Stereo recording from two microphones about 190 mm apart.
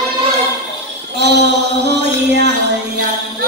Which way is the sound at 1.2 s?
65° right (ahead or behind).